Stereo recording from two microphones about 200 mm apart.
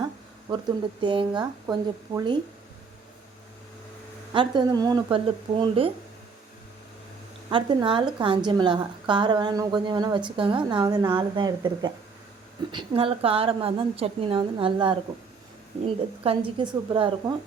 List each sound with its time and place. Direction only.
1.0 s a woman's voice: 25° right (ahead or behind)
4.3 s a woman's voice: 25° right (ahead or behind)
7.5 s a woman's voice: 25° right (ahead or behind)